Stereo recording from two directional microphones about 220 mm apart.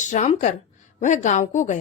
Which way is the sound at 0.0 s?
35° left (ahead or behind).